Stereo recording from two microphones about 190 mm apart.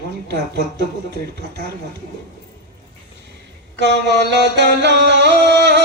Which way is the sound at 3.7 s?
65° right (ahead or behind).